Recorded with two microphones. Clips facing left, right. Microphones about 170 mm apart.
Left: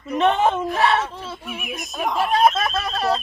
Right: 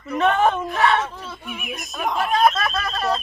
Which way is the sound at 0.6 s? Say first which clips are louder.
Even; centre (ahead or behind).